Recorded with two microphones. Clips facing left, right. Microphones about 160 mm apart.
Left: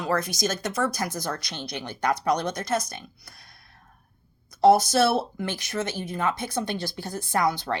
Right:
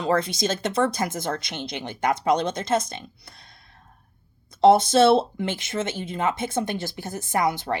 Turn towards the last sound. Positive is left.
turn(degrees=-20)  # may be behind; listen again after turning